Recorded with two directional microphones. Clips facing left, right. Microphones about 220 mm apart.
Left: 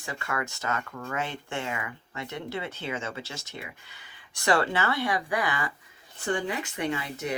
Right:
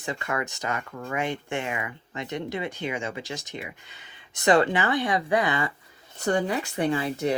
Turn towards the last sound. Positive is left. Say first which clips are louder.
# right 6 dB
turn(degrees=-35)  # may be behind; listen again after turning